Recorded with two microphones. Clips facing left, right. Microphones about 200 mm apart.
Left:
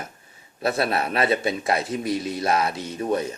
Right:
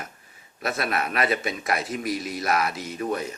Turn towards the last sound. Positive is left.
turn(degrees=30)  # may be behind; listen again after turning